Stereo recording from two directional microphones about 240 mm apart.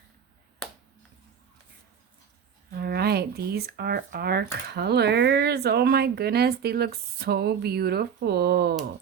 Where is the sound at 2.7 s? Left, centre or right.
Right.